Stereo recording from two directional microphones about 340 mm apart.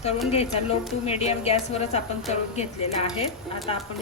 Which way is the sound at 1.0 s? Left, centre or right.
Centre.